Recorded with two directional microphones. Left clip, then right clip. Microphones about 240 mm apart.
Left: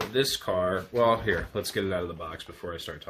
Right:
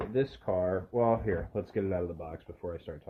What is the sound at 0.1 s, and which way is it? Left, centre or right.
Speech, left.